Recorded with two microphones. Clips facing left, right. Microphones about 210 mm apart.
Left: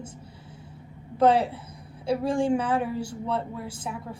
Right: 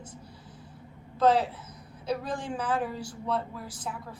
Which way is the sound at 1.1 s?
30° left (ahead or behind).